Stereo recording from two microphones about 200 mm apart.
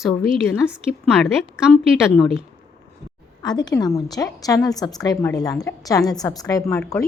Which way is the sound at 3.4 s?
20° left (ahead or behind).